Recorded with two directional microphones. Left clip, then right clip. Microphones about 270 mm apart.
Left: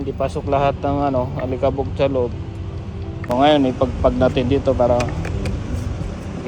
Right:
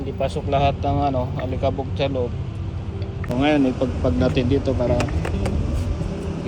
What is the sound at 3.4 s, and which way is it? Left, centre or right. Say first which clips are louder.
Speech: left 5 dB; centre.